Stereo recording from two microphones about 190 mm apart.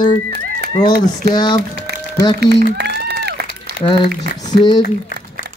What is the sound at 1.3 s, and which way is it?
Speech, 20° left (ahead or behind).